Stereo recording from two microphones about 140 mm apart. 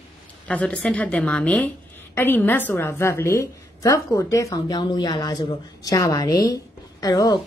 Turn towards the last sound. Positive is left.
turn(degrees=30)  # may be behind; listen again after turning